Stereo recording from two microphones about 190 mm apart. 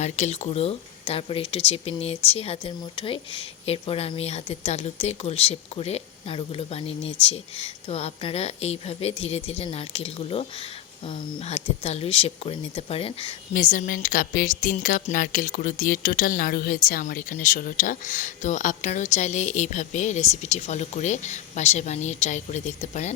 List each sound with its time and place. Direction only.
0.0 s speech: 35° left (ahead or behind)
13.5 s speech: 45° left (ahead or behind)